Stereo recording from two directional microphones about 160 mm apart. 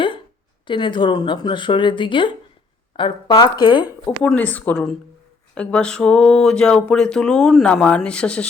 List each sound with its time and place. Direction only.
0.7 s speech: 30° left (ahead or behind)
4.0 s speech: 10° left (ahead or behind)